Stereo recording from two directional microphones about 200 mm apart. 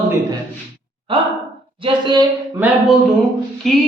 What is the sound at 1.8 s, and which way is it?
Speech, 20° right (ahead or behind).